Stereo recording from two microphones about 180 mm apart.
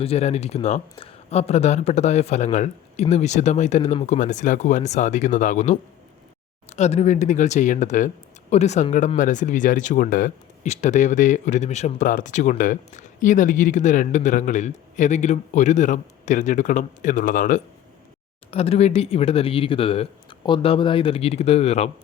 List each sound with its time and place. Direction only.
0.0 s speech: 35° left (ahead or behind)
18.5 s speech: 35° left (ahead or behind)